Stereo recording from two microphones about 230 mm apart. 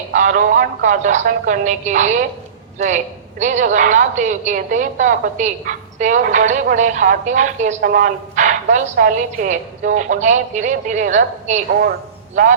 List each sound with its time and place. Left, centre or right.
0.1 s a woman's voice: right